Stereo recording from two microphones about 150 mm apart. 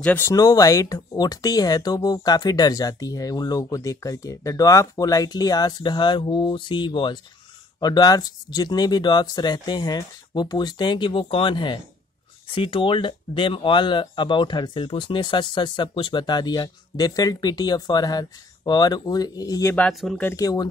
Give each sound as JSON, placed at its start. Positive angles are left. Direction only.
{"t": 0.0, "sound": "speech", "side_deg": 15}
{"t": 19.7, "sound": "speech", "side_deg": 5}
{"t": 20.2, "sound": "speech", "side_deg": 20}